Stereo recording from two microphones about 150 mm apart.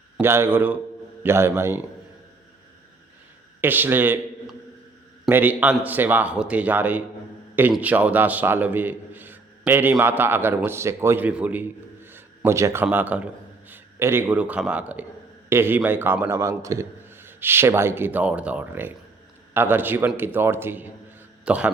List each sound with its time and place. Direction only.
0.2 s a man's voice: 15° right (ahead or behind)
3.6 s a man's voice: 15° right (ahead or behind)
5.3 s a man's voice: 10° right (ahead or behind)
12.1 s a sound: 15° right (ahead or behind)
12.8 s a man's voice: 10° right (ahead or behind)